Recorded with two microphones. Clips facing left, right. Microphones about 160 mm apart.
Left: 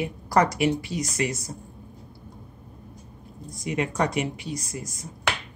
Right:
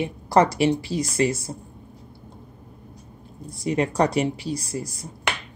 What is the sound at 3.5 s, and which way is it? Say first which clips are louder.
Speech: right 4 dB; 30° right (ahead or behind).